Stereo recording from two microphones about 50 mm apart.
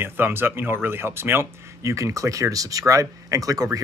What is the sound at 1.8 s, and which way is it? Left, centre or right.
Speech, right.